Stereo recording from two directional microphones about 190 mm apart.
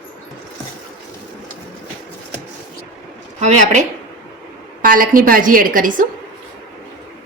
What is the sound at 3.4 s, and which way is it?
A woman's voice, 40° right (ahead or behind).